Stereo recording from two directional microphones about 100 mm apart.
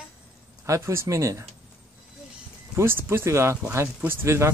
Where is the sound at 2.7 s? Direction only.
25° right (ahead or behind).